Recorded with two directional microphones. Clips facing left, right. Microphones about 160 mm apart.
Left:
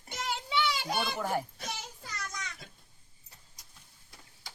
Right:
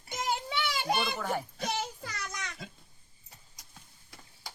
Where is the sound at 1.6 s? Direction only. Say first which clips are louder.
Right 7 dB; 70° right (ahead or behind).